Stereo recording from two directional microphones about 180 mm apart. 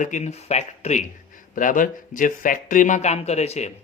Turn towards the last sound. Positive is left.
turn(degrees=35)  # may be behind; listen again after turning